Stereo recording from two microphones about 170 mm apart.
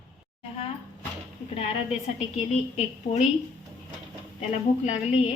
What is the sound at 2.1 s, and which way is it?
A woman's voice, 40° left (ahead or behind).